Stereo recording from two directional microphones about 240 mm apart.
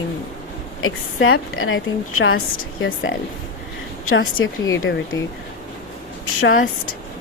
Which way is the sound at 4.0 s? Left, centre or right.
Left.